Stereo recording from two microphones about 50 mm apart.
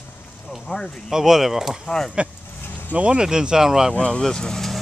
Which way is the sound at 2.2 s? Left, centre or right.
Right.